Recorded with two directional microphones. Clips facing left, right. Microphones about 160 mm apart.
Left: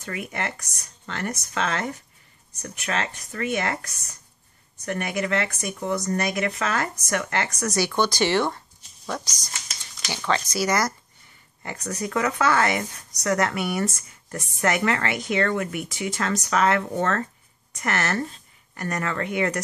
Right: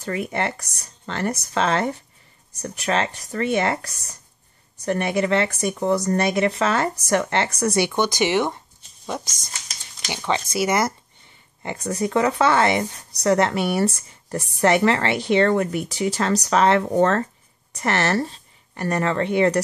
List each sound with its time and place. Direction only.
0.0 s speech: 30° right (ahead or behind)